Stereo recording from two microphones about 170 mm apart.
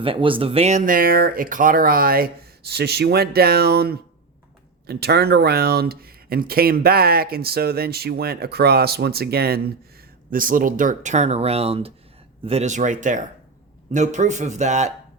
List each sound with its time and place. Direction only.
0.0 s speech: 30° right (ahead or behind); by 9.7 s 65° right (ahead or behind)
10.3 s speech: 55° right (ahead or behind)